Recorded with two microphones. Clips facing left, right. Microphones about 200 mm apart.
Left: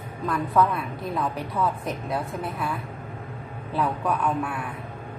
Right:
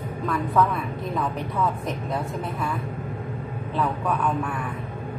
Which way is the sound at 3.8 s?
5° left (ahead or behind).